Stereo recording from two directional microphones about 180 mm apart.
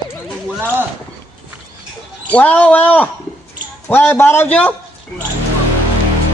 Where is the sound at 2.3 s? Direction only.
10° left (ahead or behind).